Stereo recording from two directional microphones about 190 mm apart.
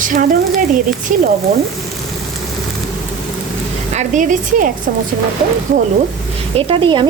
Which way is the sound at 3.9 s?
40° right (ahead or behind).